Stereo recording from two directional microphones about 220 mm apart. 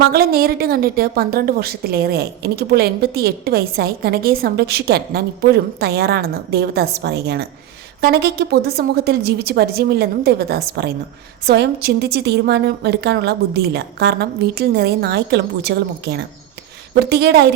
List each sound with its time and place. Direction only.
0.1 s a woman's voice: 45° right (ahead or behind)